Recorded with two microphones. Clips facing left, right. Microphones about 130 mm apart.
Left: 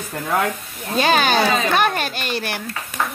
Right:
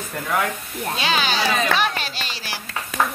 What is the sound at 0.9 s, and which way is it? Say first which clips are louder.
Speech: left 7 dB; 50° left (ahead or behind).